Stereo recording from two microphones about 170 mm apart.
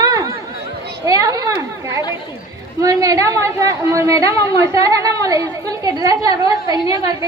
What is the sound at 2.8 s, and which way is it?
A woman's voice, 20° right (ahead or behind).